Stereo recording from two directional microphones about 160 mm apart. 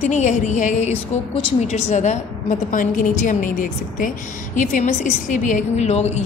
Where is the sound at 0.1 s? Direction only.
50° left (ahead or behind).